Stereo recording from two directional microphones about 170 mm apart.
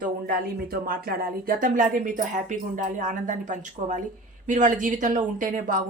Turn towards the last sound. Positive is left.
turn(degrees=-55)  # may be behind; listen again after turning